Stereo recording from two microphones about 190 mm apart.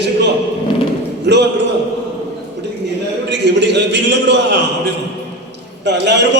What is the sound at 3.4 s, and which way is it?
A man's voice, 65° right (ahead or behind).